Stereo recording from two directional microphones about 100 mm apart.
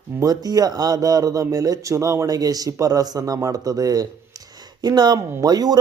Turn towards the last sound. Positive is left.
turn(degrees=-40)  # may be behind; listen again after turning